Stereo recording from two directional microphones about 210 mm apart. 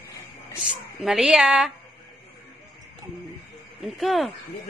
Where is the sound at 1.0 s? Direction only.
Centre (ahead or behind).